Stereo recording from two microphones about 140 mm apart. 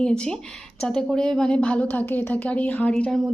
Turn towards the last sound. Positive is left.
turn(degrees=5)  # may be behind; listen again after turning